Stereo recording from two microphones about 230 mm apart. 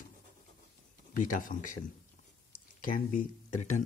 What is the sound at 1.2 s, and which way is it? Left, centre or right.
Speech, left.